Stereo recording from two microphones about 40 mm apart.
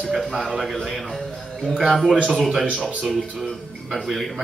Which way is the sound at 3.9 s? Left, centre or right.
Centre.